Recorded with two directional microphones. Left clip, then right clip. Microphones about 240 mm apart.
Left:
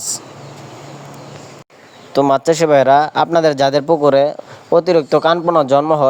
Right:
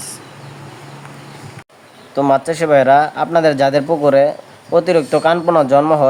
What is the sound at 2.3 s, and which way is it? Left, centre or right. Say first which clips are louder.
A man's voice: even; left.